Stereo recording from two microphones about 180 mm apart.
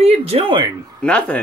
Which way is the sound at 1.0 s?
5° left (ahead or behind).